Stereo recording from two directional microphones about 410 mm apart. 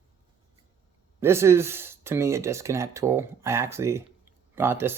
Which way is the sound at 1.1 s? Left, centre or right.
Centre.